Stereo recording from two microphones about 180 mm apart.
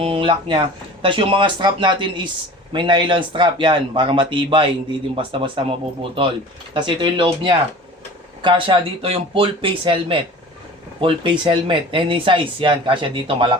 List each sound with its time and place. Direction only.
0.0 s speech: 30° right (ahead or behind)